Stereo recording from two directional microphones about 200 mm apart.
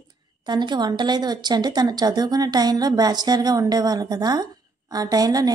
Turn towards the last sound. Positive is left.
turn(degrees=-20)  # may be behind; listen again after turning